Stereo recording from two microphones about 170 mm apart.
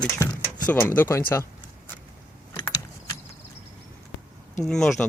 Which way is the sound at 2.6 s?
25° left (ahead or behind).